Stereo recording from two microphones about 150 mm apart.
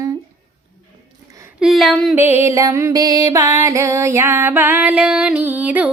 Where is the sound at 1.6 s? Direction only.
Centre (ahead or behind).